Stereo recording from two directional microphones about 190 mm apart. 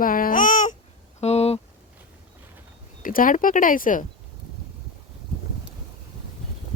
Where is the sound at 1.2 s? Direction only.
35° left (ahead or behind).